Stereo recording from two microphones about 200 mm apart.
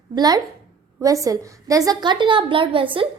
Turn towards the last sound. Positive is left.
turn(degrees=-25)  # may be behind; listen again after turning